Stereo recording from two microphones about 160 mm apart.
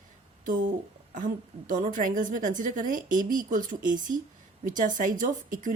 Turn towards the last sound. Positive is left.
turn(degrees=-55)  # may be behind; listen again after turning